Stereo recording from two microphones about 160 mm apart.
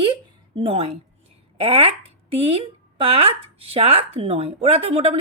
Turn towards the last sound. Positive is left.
turn(degrees=-40)  # may be behind; listen again after turning